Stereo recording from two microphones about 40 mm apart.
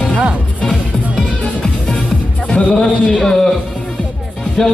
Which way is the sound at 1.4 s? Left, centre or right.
Centre.